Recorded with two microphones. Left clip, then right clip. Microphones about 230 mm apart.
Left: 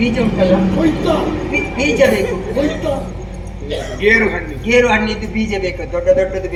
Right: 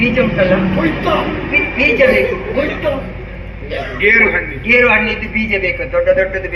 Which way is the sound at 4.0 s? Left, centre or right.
Left.